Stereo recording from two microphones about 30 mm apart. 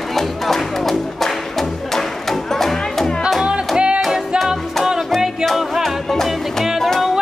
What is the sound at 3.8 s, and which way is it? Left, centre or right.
Music, right.